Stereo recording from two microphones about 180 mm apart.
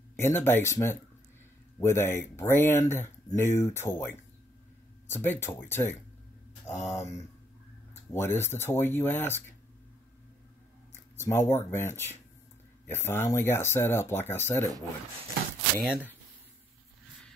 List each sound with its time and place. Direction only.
0.1 s speech: 15° left (ahead or behind)
11.1 s speech: 15° left (ahead or behind)
15.9 s speech: 10° right (ahead or behind)